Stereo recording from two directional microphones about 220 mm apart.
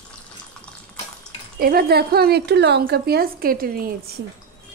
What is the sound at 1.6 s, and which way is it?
A woman's voice, 45° right (ahead or behind).